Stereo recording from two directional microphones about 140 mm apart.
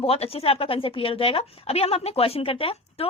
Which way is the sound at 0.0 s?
45° left (ahead or behind).